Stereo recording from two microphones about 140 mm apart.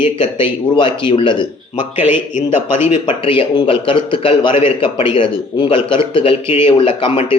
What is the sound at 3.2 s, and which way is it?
Speech, 35° left (ahead or behind).